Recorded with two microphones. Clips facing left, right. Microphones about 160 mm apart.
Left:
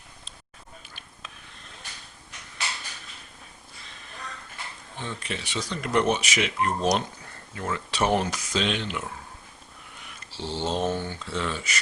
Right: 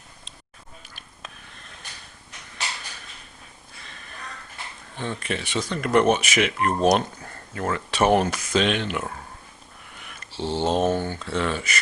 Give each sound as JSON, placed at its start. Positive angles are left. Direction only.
{"t": 4.9, "sound": "speech", "side_deg": -55}